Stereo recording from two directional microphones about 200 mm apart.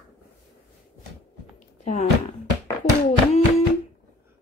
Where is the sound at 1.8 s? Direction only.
35° left (ahead or behind).